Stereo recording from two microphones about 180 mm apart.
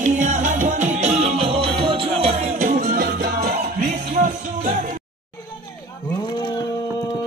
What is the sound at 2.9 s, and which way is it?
Music, 60° right (ahead or behind).